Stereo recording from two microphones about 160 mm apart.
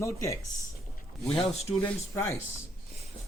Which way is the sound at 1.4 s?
40° left (ahead or behind).